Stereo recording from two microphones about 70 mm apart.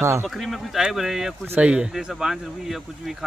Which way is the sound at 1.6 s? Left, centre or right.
Centre.